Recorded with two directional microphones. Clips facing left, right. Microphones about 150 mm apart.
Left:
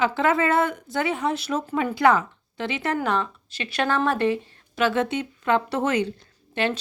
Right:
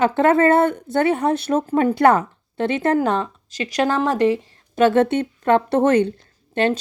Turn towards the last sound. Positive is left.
turn(degrees=-45)  # may be behind; listen again after turning